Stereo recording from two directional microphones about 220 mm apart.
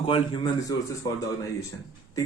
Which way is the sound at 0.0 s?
25° left (ahead or behind).